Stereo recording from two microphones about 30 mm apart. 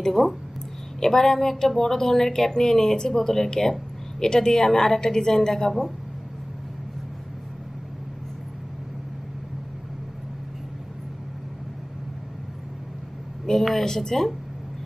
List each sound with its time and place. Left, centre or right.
0.2 s a woman's voice: centre
1.0 s a woman's voice: centre
13.5 s a sound: left
13.8 s speech: centre